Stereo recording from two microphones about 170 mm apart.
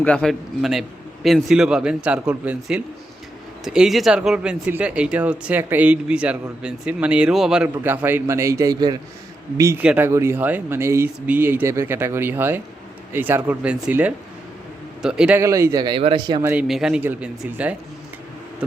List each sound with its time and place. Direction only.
0.0 s a man's voice: 5° left (ahead or behind)
15.4 s speech: 15° right (ahead or behind)
16.4 s speech: 10° right (ahead or behind)